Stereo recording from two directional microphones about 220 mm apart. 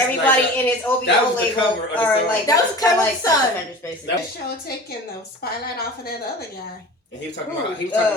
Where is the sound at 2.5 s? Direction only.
15° left (ahead or behind).